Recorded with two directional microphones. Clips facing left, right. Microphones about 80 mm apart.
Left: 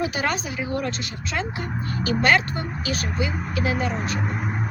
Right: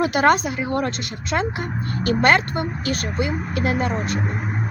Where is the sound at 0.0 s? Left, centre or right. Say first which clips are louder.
Right 8 dB; right.